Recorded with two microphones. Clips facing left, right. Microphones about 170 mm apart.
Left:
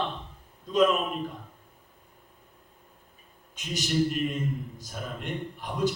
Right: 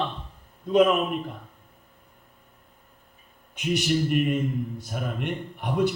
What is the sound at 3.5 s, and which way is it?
A man's voice, 60° right (ahead or behind).